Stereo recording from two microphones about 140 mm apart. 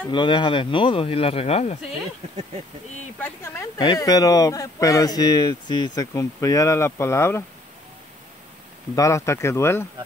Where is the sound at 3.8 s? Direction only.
30° left (ahead or behind).